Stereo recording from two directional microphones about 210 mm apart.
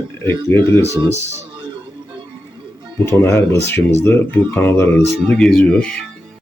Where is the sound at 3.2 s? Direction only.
15° left (ahead or behind).